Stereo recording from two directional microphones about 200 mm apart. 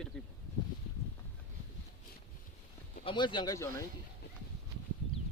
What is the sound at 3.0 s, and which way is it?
Speech, 25° left (ahead or behind).